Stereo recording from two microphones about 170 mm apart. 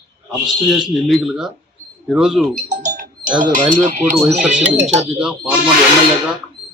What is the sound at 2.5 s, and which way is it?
Bird, 45° right (ahead or behind).